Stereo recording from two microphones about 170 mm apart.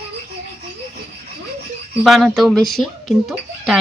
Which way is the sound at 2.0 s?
Centre (ahead or behind).